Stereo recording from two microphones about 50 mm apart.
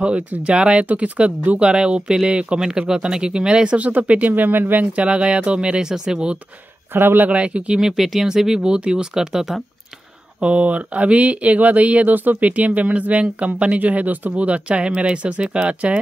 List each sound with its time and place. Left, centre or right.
0.5 s speech: right
3.7 s speech: right
4.9 s speech: right
6.9 s speech: right
7.2 s speech: right
7.8 s speech: centre
10.4 s speech: right